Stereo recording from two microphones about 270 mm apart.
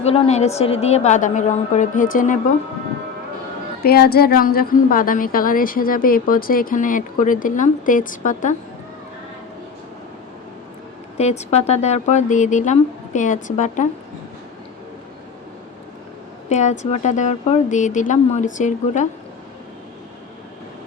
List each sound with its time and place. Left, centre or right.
0.0 s speech: left
3.8 s a woman's voice: left
11.2 s speech: left
16.5 s speech: left